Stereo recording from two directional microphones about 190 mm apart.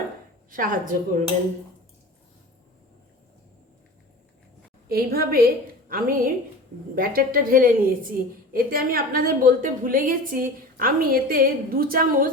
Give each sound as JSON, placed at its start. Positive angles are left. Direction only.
{"t": 0.5, "sound": "a woman's voice", "side_deg": -45}
{"t": 4.9, "sound": "a woman's voice", "side_deg": -55}